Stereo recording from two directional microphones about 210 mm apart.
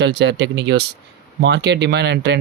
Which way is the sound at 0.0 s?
55° right (ahead or behind).